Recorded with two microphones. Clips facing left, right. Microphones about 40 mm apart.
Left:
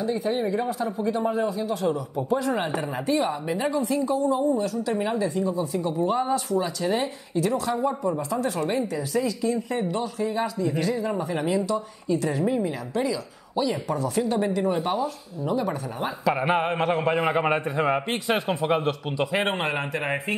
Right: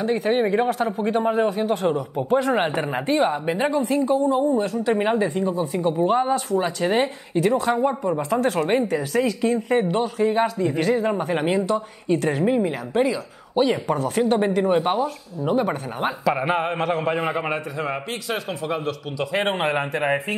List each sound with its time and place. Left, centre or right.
0.0 s speech: right
6.6 s speech: right
16.3 s a man's voice: centre
17.3 s a man's voice: centre
19.3 s speech: centre